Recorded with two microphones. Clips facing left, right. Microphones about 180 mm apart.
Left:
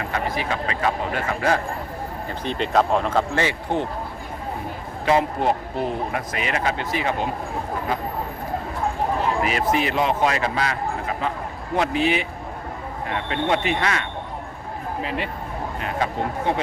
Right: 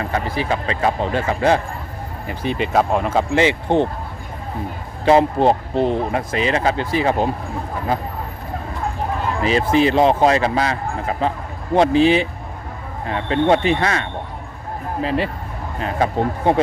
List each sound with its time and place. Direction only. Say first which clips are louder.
0.0 s speech: right 3 dB; 30° right (ahead or behind)
2.2 s speech: right 5 dB; 10° right (ahead or behind)
3.3 s speech: right 7 dB; 25° right (ahead or behind)
5.0 s speech: right 6 dB; 30° right (ahead or behind)
9.4 s speech: right 5 dB; 30° right (ahead or behind)